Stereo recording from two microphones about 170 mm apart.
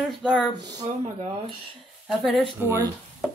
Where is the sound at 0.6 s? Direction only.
25° right (ahead or behind).